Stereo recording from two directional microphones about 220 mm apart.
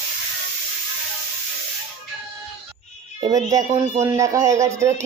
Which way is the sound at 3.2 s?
15° right (ahead or behind).